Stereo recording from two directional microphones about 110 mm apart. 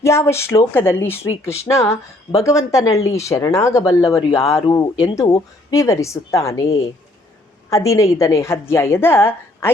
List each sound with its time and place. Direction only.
0.0 s speech: 25° left (ahead or behind)